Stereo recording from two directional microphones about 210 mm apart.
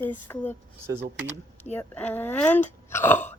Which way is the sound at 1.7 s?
10° left (ahead or behind).